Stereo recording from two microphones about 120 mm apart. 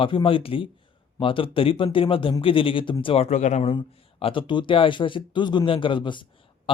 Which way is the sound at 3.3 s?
75° left (ahead or behind).